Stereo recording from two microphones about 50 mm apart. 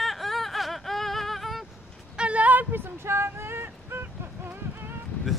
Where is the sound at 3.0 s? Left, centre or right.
Right.